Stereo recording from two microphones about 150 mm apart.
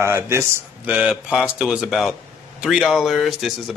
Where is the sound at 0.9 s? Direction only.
5° right (ahead or behind).